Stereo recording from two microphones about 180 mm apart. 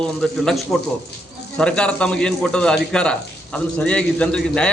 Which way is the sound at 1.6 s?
5° left (ahead or behind).